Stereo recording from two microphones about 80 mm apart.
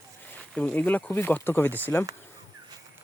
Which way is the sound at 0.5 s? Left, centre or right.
Centre.